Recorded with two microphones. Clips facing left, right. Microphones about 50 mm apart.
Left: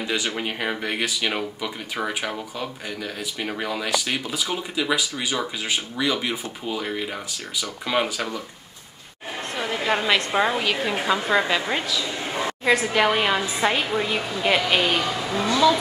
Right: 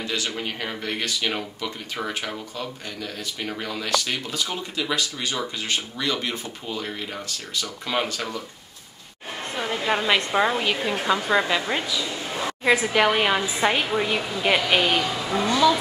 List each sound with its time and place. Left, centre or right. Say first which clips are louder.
0.0 s speech: left 2 dB; centre
9.6 s a woman's voice: even; centre
12.6 s a woman's voice: even; centre